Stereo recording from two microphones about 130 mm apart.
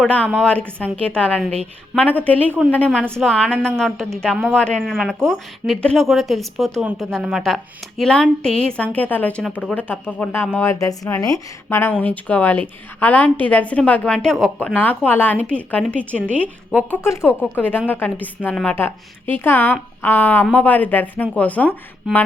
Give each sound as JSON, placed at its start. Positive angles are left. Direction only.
{"t": 0.0, "sound": "a woman's voice", "side_deg": 10}
{"t": 10.5, "sound": "speech", "side_deg": 20}
{"t": 11.8, "sound": "a woman's voice", "side_deg": 15}
{"t": 14.8, "sound": "a woman's voice", "side_deg": 15}
{"t": 22.0, "sound": "a woman's voice", "side_deg": 0}